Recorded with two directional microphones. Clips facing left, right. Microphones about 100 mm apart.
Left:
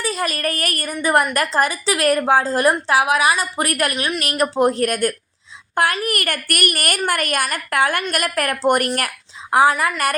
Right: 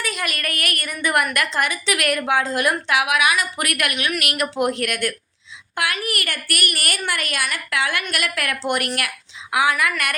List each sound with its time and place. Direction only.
0.0 s a woman's voice: 35° left (ahead or behind)